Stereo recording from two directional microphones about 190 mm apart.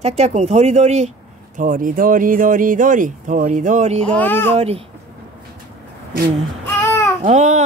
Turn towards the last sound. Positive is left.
turn(degrees=-40)  # may be behind; listen again after turning